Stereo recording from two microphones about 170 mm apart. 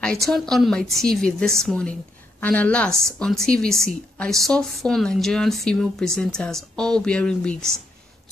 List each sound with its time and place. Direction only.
0.0 s a woman's voice: 5° left (ahead or behind)